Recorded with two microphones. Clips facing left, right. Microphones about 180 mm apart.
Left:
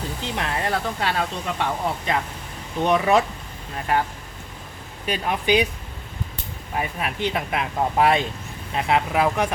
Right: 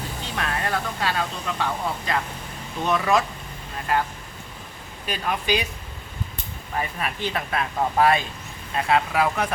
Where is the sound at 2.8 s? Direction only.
20° left (ahead or behind).